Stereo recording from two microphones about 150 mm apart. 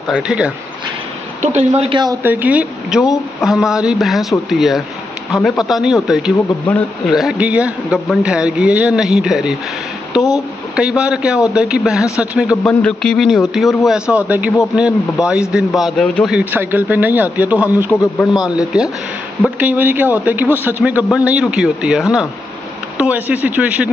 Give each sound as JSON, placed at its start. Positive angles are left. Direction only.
{"t": 0.1, "sound": "a man's voice", "side_deg": -5}
{"t": 1.4, "sound": "speech", "side_deg": -50}
{"t": 2.2, "sound": "a man's voice", "side_deg": -10}
{"t": 10.8, "sound": "a man's voice", "side_deg": -5}
{"t": 12.6, "sound": "a man's voice", "side_deg": 5}
{"t": 16.3, "sound": "a man's voice", "side_deg": -10}
{"t": 19.6, "sound": "a man's voice", "side_deg": -10}